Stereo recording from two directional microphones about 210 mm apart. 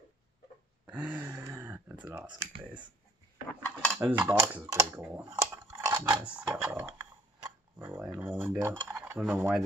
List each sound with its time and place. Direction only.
0.8 s a sound: 5° right (ahead or behind)
3.6 s cutlery: 5° left (ahead or behind)
4.0 s speech: 10° right (ahead or behind)
5.5 s a sound: 15° right (ahead or behind)
6.2 s tick-tock: 5° right (ahead or behind)
8.2 s cutlery: 5° right (ahead or behind)